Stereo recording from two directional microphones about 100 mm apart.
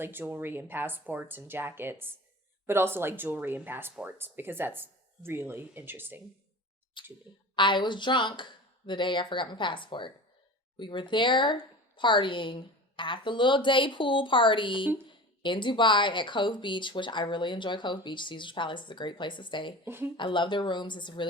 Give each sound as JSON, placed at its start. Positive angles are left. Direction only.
{"t": 0.0, "sound": "speech", "side_deg": -20}
{"t": 7.0, "sound": "a woman's voice", "side_deg": 50}
{"t": 19.8, "sound": "speech", "side_deg": -20}
{"t": 20.1, "sound": "speech", "side_deg": 55}